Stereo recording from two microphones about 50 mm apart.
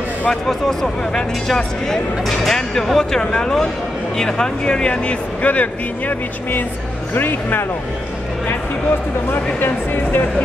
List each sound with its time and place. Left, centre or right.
0.3 s speech: centre; by 6.6 s left
7.2 s speech: left
9.3 s speech: left